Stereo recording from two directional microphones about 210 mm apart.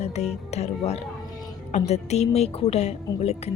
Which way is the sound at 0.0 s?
30° left (ahead or behind).